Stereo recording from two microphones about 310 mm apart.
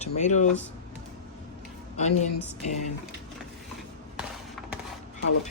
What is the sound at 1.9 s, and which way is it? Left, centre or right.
Speech, left.